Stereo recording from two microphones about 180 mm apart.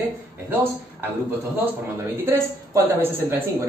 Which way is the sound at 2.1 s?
15° right (ahead or behind).